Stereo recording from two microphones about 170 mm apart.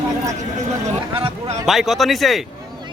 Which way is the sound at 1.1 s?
30° right (ahead or behind).